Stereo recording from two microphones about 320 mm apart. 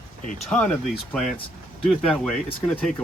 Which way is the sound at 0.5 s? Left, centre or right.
Centre.